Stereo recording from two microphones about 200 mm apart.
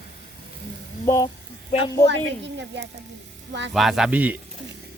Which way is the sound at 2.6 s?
60° right (ahead or behind).